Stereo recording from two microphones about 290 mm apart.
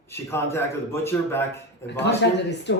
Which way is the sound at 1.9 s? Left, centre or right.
Left.